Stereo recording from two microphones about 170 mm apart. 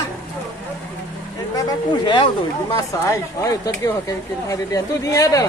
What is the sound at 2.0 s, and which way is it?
Speech, 25° left (ahead or behind).